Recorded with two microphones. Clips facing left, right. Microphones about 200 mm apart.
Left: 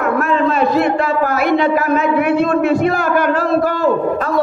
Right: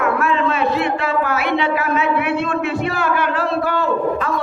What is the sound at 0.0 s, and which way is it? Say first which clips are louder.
A man's voice: left 3 dB; 45° left (ahead or behind).